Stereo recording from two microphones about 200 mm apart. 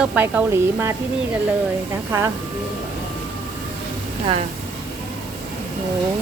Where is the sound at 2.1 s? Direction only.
10° right (ahead or behind).